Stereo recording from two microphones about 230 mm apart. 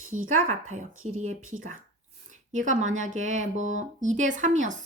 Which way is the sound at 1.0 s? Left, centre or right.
Right.